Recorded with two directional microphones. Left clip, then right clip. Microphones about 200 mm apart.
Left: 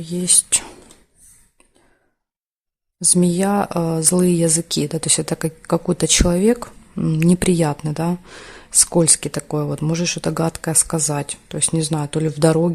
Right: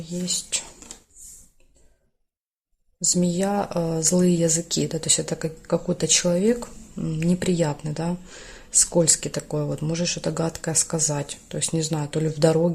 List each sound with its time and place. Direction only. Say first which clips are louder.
0.0 s speech: left 7 dB; 50° left (ahead or behind)
3.0 s speech: left 5 dB; 40° left (ahead or behind)